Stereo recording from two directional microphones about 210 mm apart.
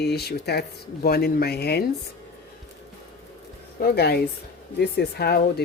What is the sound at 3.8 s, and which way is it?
Speech, 45° left (ahead or behind).